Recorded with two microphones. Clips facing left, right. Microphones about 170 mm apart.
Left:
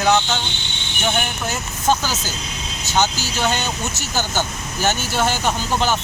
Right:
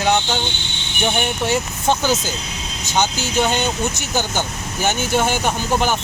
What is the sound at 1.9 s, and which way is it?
Speech, 20° right (ahead or behind).